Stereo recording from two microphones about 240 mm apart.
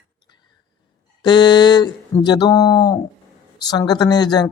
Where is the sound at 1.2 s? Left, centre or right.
Centre.